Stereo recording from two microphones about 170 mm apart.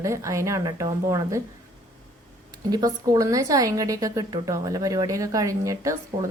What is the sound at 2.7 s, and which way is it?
A woman's voice, 20° right (ahead or behind).